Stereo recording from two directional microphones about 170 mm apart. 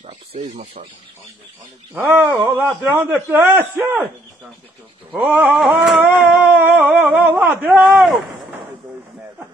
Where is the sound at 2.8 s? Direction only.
10° right (ahead or behind).